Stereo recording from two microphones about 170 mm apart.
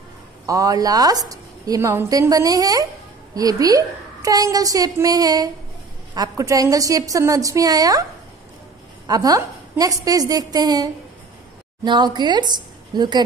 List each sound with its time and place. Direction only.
0.5 s a woman's voice: 20° right (ahead or behind)
9.0 s a woman's voice: 20° right (ahead or behind)